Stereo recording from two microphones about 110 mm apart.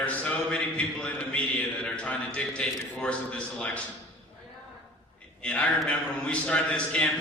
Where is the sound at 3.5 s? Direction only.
10° left (ahead or behind).